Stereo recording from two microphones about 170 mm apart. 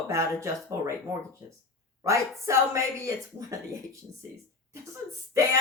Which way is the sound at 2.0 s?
15° right (ahead or behind).